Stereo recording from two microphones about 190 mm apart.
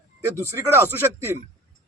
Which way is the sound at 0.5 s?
15° right (ahead or behind).